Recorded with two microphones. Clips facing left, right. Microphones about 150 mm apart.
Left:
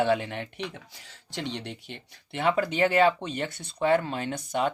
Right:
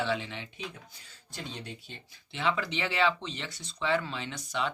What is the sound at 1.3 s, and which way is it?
Speech, 80° left.